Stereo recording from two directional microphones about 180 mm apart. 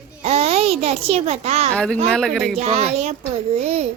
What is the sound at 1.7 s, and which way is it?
Speech, 5° left (ahead or behind).